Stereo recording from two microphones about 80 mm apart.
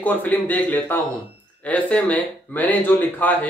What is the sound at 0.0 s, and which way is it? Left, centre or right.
Speech, left.